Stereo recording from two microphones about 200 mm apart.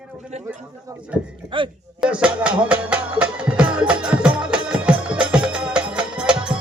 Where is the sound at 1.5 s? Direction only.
25° right (ahead or behind).